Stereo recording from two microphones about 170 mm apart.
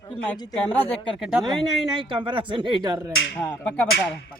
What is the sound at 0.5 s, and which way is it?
Speech, 10° left (ahead or behind).